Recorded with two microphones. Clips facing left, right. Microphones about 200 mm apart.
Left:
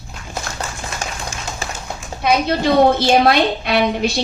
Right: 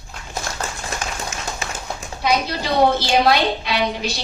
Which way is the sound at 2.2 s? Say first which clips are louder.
Left 5 dB; 55° left (ahead or behind).